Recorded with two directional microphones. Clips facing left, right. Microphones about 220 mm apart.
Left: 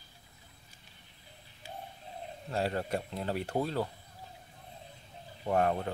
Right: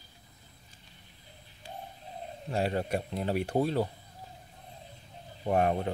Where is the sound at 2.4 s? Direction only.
15° right (ahead or behind).